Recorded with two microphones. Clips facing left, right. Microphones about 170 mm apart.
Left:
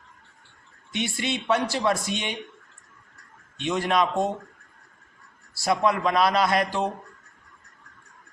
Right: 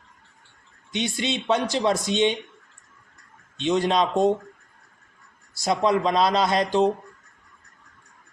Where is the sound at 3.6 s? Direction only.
20° right (ahead or behind).